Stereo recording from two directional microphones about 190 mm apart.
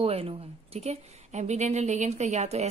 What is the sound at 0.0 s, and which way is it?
A woman's voice, 30° right (ahead or behind).